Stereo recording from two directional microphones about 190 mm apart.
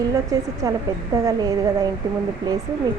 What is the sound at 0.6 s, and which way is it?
Speech, 20° right (ahead or behind).